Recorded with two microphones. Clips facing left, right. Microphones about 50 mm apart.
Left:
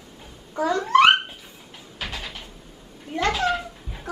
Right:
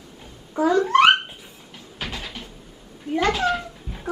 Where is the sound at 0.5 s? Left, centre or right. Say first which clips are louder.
Right 1 dB; centre.